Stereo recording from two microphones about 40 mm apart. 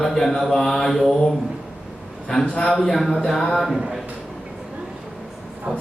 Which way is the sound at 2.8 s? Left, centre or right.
Centre.